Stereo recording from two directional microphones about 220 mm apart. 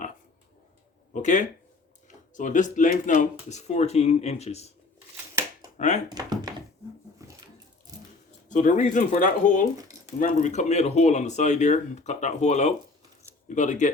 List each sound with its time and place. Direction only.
1.1 s speech: 35° left (ahead or behind)
5.7 s speech: 35° left (ahead or behind)
6.1 s speech: 20° right (ahead or behind)
7.2 s a sound: 15° right (ahead or behind)
8.4 s speech: 35° left (ahead or behind)